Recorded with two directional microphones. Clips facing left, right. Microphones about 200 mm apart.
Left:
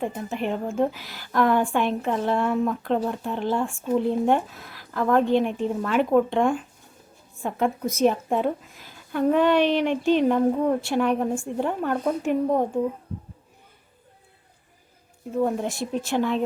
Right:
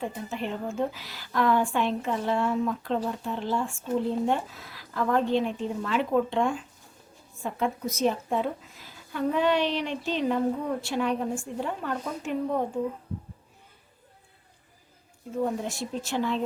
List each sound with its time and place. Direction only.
0.0 s a woman's voice: 55° left (ahead or behind)
15.4 s a woman's voice: 55° left (ahead or behind)